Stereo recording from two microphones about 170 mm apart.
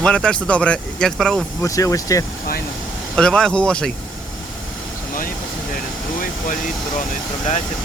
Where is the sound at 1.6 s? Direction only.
20° left (ahead or behind).